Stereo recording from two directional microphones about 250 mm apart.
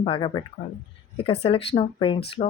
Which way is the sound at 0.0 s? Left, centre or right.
Centre.